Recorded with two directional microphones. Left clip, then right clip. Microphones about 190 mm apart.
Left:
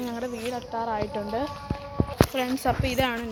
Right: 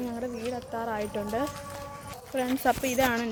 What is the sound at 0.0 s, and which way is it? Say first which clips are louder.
A woman's voice: left 2 dB; centre (ahead or behind).